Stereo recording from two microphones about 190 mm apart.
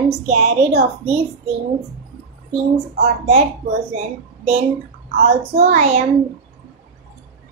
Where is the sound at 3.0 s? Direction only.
40° right (ahead or behind).